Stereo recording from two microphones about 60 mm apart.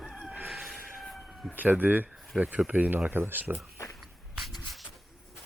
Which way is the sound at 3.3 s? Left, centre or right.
Right.